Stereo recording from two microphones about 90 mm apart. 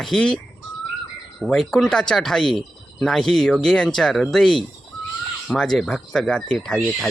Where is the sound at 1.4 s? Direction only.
5° left (ahead or behind).